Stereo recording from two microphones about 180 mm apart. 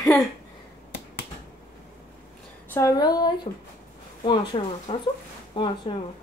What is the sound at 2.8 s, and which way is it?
Speech, 20° left (ahead or behind).